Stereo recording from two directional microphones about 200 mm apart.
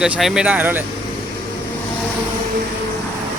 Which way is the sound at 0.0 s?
5° right (ahead or behind).